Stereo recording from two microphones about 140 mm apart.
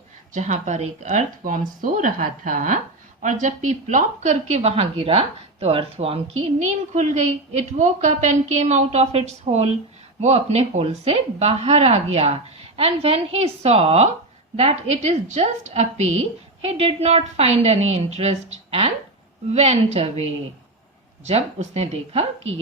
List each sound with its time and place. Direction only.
0.3 s a woman's voice: 60° right (ahead or behind); by 6.1 s 45° right (ahead or behind)
6.6 s a woman's voice: 60° right (ahead or behind)
21.2 s a woman's voice: 50° right (ahead or behind)